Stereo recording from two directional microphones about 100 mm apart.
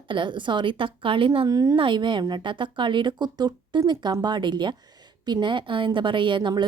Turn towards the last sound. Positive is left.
turn(degrees=-50)  # may be behind; listen again after turning